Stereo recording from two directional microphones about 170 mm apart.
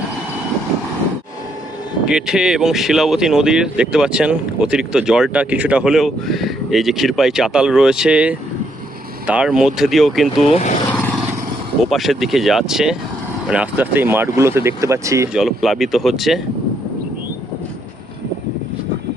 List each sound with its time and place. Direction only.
2.0 s speech: 5° right (ahead or behind)
10.4 s speech: 40° left (ahead or behind)
10.8 s vehicle: 10° left (ahead or behind)
11.9 s speech: centre (ahead or behind); by 15.3 s 15° right (ahead or behind)
15.3 s speech: centre (ahead or behind)